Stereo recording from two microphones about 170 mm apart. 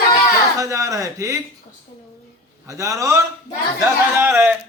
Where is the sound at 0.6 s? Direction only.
20° right (ahead or behind).